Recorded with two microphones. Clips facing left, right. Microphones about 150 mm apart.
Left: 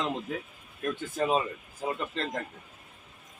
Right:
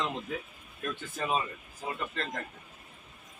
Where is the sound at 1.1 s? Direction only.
30° left (ahead or behind).